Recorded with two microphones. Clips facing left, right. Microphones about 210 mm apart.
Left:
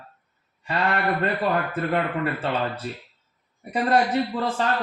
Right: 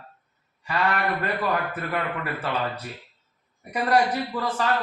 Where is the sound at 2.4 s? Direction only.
25° left (ahead or behind).